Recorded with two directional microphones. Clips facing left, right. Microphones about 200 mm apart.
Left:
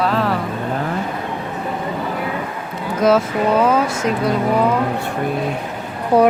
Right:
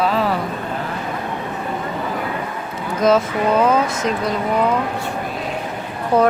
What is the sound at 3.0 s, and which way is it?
Speech, 5° left (ahead or behind).